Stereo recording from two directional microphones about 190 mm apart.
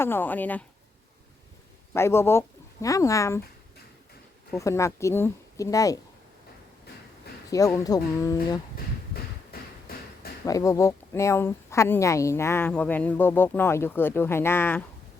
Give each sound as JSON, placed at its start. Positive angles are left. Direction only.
{"t": 0.0, "sound": "speech", "side_deg": 10}
{"t": 1.9, "sound": "speech", "side_deg": 15}
{"t": 4.5, "sound": "speech", "side_deg": 15}
{"t": 7.7, "sound": "speech", "side_deg": 15}
{"t": 9.5, "sound": "a sound", "side_deg": 55}
{"t": 10.4, "sound": "speech", "side_deg": 15}